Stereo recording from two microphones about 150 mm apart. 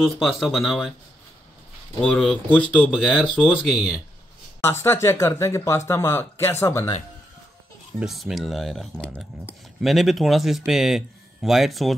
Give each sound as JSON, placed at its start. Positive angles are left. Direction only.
{"t": 0.0, "sound": "speech", "side_deg": 0}
{"t": 2.0, "sound": "speech", "side_deg": 5}
{"t": 4.6, "sound": "speech", "side_deg": 15}
{"t": 8.0, "sound": "speech", "side_deg": 0}